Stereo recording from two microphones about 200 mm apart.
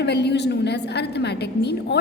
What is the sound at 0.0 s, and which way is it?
A woman's voice, 60° left (ahead or behind).